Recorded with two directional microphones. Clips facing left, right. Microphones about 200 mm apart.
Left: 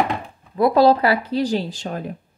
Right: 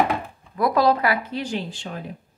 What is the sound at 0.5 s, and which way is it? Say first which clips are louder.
Speech: left 5 dB; 30° left (ahead or behind).